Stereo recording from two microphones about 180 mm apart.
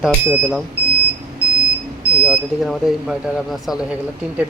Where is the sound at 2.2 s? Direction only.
5° right (ahead or behind).